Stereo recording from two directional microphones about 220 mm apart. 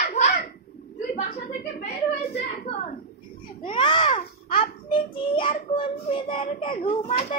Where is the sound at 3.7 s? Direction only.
20° left (ahead or behind).